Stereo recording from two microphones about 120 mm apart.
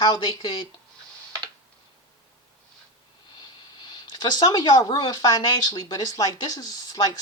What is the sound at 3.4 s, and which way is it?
Speech, 40° left (ahead or behind).